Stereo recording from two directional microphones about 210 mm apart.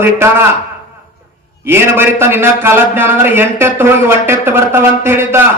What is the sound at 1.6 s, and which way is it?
A man's voice, 10° right (ahead or behind).